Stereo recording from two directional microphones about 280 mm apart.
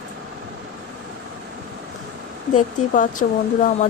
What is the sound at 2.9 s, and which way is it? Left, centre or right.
Speech, left.